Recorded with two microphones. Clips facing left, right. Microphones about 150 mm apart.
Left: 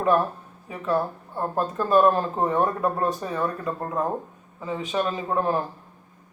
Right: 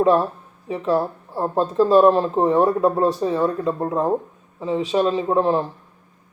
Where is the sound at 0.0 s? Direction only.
25° right (ahead or behind).